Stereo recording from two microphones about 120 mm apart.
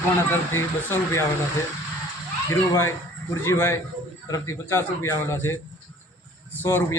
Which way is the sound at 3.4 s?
20° left (ahead or behind).